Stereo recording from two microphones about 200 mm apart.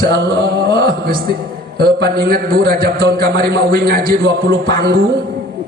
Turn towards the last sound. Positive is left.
turn(degrees=-50)  # may be behind; listen again after turning